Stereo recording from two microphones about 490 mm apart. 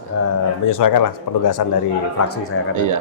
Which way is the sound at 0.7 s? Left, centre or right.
Left.